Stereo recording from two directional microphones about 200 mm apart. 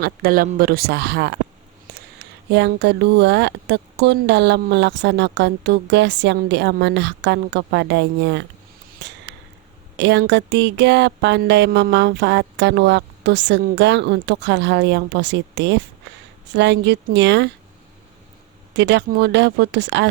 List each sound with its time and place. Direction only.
0.0 s speech: 45° right (ahead or behind)
9.3 s arrow: 55° right (ahead or behind)
10.0 s speech: 60° right (ahead or behind)
18.8 s speech: 60° right (ahead or behind)